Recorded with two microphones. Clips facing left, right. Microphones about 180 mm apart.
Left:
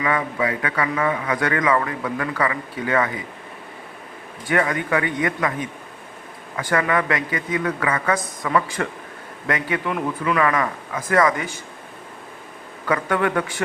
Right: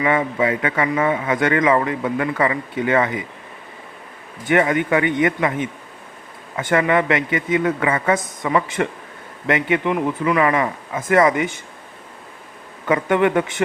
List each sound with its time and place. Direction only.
0.0 s a man's voice: 25° right (ahead or behind)
4.4 s a man's voice: 25° right (ahead or behind)
9.9 s speech: 10° right (ahead or behind)
10.5 s a man's voice: 25° right (ahead or behind)
12.8 s a man's voice: 20° right (ahead or behind)